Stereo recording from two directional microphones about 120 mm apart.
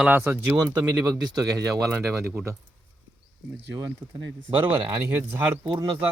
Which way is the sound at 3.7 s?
30° right (ahead or behind).